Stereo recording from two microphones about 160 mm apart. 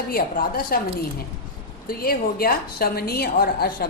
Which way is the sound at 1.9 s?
65° left (ahead or behind).